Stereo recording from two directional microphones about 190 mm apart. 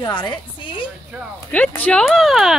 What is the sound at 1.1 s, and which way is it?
Speech, 5° right (ahead or behind).